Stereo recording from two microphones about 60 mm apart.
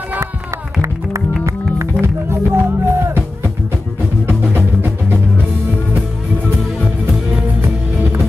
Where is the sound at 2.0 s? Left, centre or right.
Right.